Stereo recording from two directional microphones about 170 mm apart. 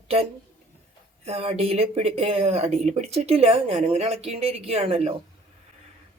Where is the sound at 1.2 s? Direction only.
35° right (ahead or behind).